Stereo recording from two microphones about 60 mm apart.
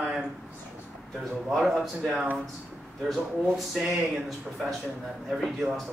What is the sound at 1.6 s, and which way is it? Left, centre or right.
Speech, centre.